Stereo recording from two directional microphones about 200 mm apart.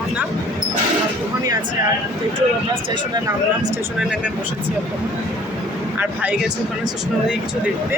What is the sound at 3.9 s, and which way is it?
Speech, 5° right (ahead or behind).